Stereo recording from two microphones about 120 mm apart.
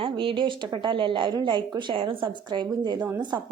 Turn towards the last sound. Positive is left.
turn(degrees=-35)  # may be behind; listen again after turning